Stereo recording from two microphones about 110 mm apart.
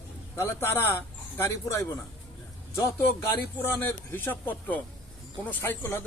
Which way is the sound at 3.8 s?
20° left (ahead or behind).